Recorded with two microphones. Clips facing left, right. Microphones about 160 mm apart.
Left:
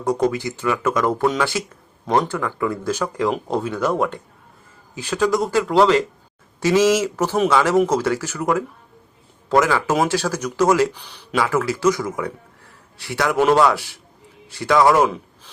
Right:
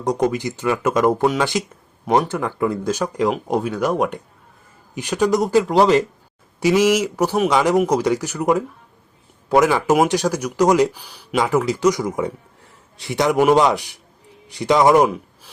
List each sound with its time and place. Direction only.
0.0 s speech: 20° right (ahead or behind)